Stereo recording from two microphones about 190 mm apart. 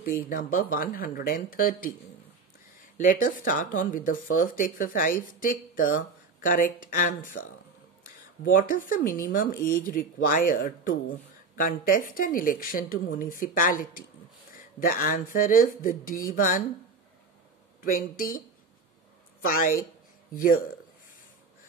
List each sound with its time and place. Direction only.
0.3 s speech: 45° left (ahead or behind)
3.0 s speech: 45° left (ahead or behind)
8.5 s speech: 45° left (ahead or behind)
17.8 s speech: 50° left (ahead or behind)
19.4 s speech: 50° left (ahead or behind)